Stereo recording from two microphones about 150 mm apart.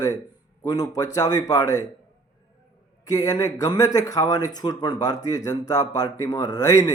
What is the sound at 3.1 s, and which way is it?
A man's voice, 25° left (ahead or behind).